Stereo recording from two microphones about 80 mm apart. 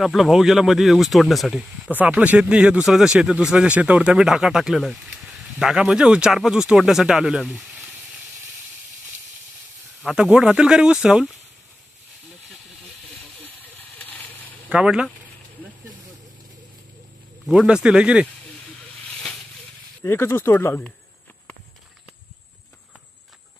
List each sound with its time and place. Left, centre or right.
0.0 s speech: centre
1.9 s speech: right; by 7.9 s centre
10.2 s speech: centre
13.4 s hiss: left
14.7 s speech: centre
17.6 s speech: centre
20.0 s speech: left